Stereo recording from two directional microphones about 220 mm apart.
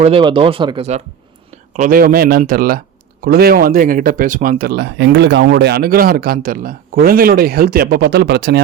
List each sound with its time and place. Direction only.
0.0 s speech: 25° right (ahead or behind); by 8.6 s 50° right (ahead or behind)